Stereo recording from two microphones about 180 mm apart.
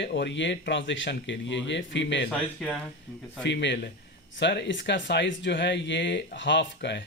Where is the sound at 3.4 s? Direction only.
80° left.